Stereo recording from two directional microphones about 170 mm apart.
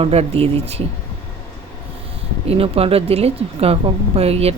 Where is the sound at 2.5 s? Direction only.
35° right (ahead or behind).